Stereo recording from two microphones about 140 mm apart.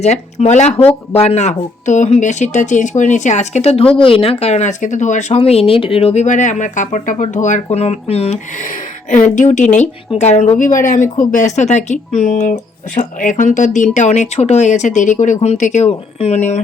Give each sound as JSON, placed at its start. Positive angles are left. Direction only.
{"t": 0.0, "sound": "speech", "side_deg": 55}
{"t": 5.4, "sound": "speech", "side_deg": 45}
{"t": 9.0, "sound": "speech", "side_deg": 65}